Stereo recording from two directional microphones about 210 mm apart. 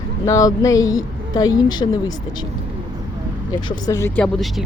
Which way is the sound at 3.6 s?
20° left (ahead or behind).